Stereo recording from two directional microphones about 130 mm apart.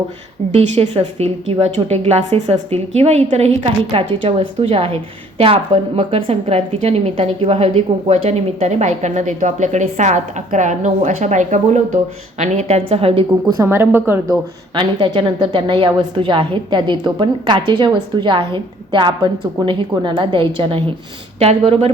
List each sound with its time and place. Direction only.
0.5 s a woman's voice: 50° right (ahead or behind)
13.6 s a woman's voice: 20° right (ahead or behind)
14.8 s a woman's voice: 35° right (ahead or behind)